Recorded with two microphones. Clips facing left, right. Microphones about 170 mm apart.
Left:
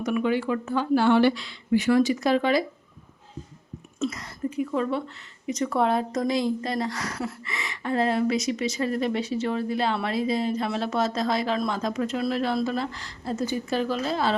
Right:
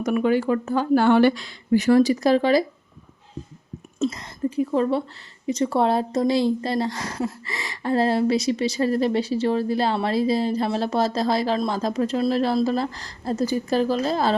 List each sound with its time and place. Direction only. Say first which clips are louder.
0.0 s speech: right 4 dB; 45° right (ahead or behind)
4.0 s speech: right 4 dB; 30° right (ahead or behind)